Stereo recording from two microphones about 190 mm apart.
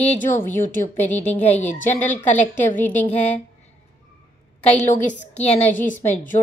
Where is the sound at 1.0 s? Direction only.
10° left (ahead or behind).